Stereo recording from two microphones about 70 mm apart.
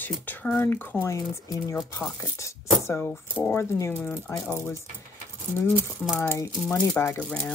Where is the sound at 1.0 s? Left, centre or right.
Left.